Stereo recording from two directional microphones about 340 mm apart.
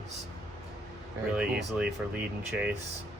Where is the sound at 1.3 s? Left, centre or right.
Centre.